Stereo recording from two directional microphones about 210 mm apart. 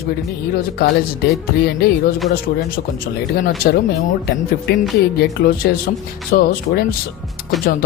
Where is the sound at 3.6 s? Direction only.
50° left (ahead or behind).